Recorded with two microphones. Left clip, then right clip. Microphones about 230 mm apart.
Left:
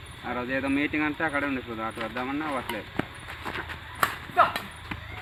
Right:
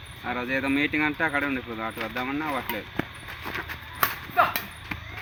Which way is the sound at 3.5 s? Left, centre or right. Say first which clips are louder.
Right 2 dB; centre.